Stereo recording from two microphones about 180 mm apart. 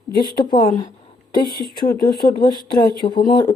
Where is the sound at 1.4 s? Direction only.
55° left (ahead or behind).